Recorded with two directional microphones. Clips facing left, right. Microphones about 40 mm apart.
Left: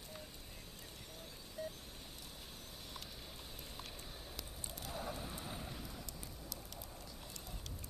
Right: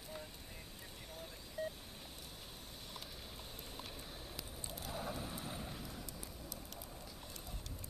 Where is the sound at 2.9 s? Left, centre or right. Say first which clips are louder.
Right 1 dB; centre.